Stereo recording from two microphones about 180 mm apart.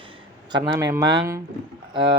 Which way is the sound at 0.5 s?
25° right (ahead or behind).